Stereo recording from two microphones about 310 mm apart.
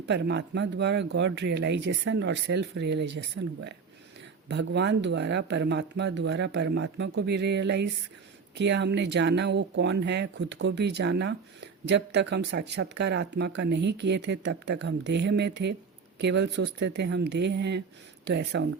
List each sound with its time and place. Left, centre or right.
0.1 s speech: right